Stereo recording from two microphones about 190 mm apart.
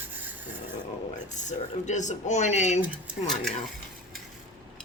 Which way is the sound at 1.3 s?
40° left (ahead or behind).